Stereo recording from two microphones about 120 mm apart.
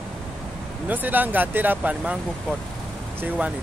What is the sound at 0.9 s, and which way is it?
Speech, 15° right (ahead or behind).